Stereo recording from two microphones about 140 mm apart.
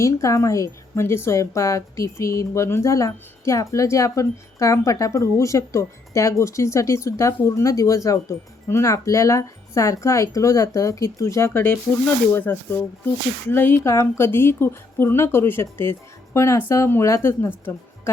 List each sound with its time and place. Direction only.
0.0 s a woman's voice: 20° left (ahead or behind)